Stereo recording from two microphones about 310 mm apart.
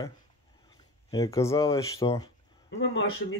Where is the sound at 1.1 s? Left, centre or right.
Centre.